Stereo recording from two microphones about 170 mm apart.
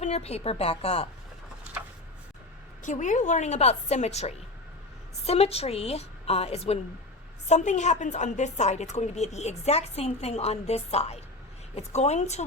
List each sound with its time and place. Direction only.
0.0 s a woman's voice: 40° left (ahead or behind)
2.8 s a woman's voice: 45° left (ahead or behind)